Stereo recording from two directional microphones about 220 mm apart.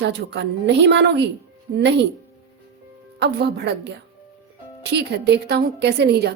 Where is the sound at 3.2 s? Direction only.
50° right (ahead or behind).